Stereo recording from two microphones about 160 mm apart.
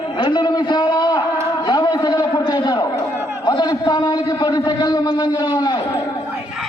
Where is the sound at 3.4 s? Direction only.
25° left (ahead or behind).